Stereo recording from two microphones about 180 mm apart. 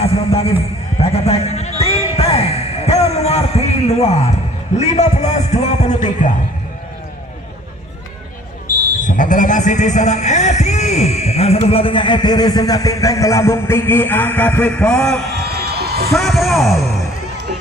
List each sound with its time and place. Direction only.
0.0 s a sound: 35° left (ahead or behind)
4.7 s a man's voice: 40° left (ahead or behind)
9.0 s speech: 45° left (ahead or behind); by 15.2 s 5° left (ahead or behind)
15.5 s music: 65° right (ahead or behind)
16.1 s speech: centre (ahead or behind)